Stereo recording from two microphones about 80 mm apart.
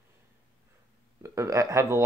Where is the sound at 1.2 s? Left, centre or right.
Right.